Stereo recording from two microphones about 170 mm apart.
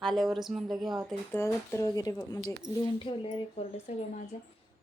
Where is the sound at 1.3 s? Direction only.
15° left (ahead or behind); by 3.2 s 30° left (ahead or behind).